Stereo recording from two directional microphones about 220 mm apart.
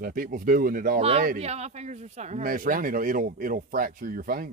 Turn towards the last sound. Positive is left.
turn(degrees=-40)  # may be behind; listen again after turning